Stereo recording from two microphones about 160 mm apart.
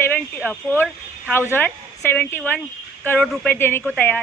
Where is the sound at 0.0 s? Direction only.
10° left (ahead or behind).